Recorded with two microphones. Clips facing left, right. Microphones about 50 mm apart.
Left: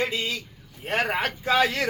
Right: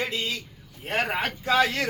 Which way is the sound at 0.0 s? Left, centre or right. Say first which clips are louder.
Left 2 dB; centre.